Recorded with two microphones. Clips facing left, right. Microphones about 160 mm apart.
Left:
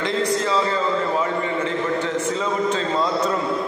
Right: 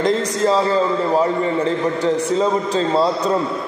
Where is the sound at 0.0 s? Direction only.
40° right (ahead or behind).